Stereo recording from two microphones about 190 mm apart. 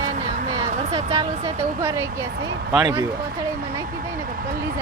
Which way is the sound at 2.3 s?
70° right (ahead or behind).